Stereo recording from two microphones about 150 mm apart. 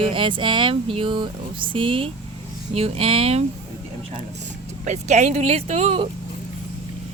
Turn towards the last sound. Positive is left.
turn(degrees=-40)  # may be behind; listen again after turning